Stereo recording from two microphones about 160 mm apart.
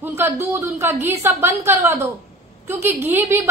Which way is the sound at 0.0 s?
15° right (ahead or behind).